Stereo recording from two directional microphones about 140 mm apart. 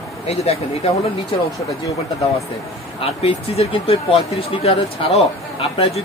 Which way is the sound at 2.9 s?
45° left (ahead or behind).